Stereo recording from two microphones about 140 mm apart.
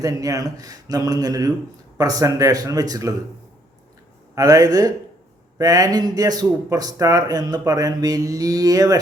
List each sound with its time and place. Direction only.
0.0 s a man's voice: 25° right (ahead or behind)
4.4 s a man's voice: 25° right (ahead or behind)